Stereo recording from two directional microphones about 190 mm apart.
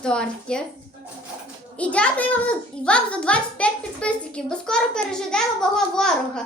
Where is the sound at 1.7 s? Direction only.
5° left (ahead or behind).